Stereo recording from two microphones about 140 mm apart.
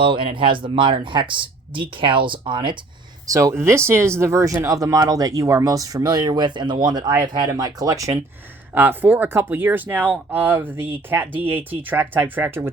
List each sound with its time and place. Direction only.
0.0 s speech: 40° right (ahead or behind)
3.2 s speech: 25° right (ahead or behind)
8.7 s speech: 15° right (ahead or behind)